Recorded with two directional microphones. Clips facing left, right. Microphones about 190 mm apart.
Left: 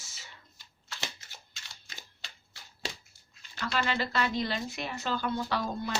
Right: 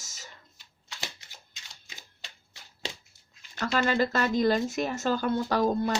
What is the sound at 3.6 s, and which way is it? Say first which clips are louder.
Speech: right 6 dB; 45° right (ahead or behind).